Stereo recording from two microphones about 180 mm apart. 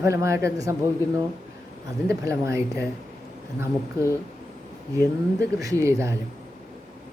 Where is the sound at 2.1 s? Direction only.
15° right (ahead or behind).